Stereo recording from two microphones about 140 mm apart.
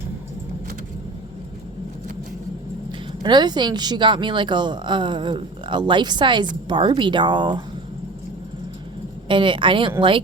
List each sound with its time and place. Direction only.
3.2 s speech: 30° right (ahead or behind)
9.3 s speech: 35° right (ahead or behind)